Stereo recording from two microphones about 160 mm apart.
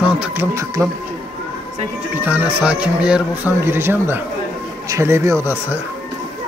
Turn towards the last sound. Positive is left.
turn(degrees=-15)  # may be behind; listen again after turning